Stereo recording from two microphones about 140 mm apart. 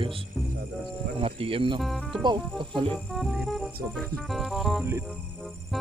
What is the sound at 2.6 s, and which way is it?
Speech, 35° right (ahead or behind).